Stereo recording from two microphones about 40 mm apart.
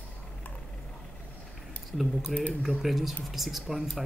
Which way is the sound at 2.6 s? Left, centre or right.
Centre.